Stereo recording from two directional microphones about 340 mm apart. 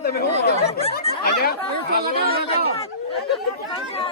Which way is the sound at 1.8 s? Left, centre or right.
Right.